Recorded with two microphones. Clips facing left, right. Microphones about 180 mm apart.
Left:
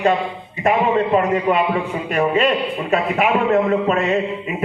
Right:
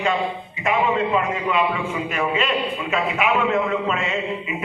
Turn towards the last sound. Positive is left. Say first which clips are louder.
# left 6 dB
turn(degrees=45)  # may be behind; listen again after turning